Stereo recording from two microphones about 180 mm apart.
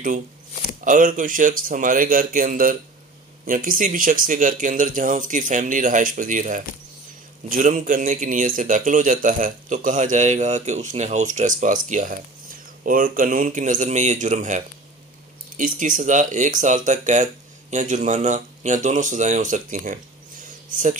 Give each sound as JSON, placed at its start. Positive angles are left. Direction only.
{"t": 0.7, "sound": "a man's voice", "side_deg": -45}